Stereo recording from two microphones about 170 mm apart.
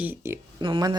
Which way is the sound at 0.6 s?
25° right (ahead or behind).